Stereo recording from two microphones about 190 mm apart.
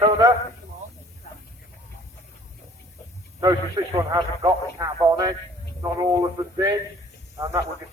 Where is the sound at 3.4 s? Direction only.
20° right (ahead or behind).